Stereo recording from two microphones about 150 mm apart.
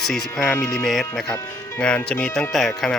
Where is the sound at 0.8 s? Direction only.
Centre (ahead or behind).